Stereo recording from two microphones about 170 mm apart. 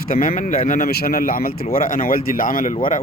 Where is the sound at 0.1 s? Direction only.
55° left (ahead or behind).